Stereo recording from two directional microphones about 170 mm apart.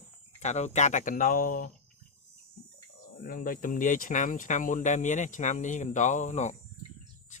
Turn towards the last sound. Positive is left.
turn(degrees=45)  # may be behind; listen again after turning